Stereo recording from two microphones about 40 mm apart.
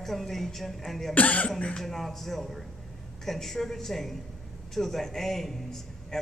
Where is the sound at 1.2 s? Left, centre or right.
Left.